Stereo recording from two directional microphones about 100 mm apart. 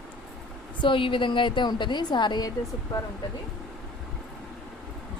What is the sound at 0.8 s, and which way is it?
A woman's voice, 55° left (ahead or behind).